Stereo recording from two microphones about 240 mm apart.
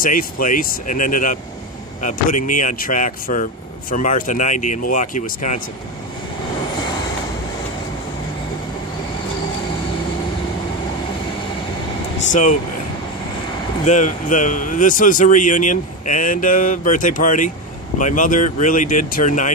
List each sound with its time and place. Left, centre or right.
0.0 s a man's voice: left
12.3 s a man's voice: left
13.8 s a man's voice: left